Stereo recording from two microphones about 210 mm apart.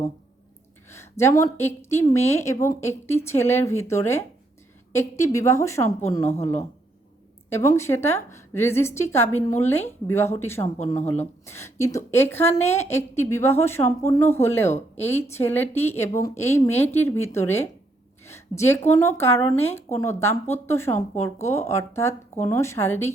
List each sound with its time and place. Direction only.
0.9 s speech: 10° left (ahead or behind)
7.5 s speech: 15° left (ahead or behind)
10.9 s speech: 30° left (ahead or behind)
11.4 s speech: 10° left (ahead or behind)